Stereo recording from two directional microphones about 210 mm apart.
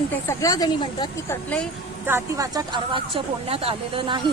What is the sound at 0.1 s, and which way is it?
A woman's voice, 15° left (ahead or behind).